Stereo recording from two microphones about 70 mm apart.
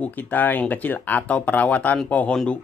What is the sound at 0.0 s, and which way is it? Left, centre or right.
Speech, left.